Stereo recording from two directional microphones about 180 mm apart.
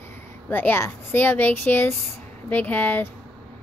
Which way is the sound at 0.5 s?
10° left (ahead or behind).